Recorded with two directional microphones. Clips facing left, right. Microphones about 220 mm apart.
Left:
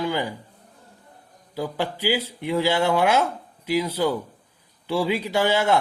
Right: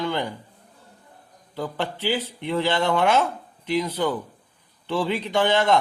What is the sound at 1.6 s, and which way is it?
Speech, 10° left (ahead or behind).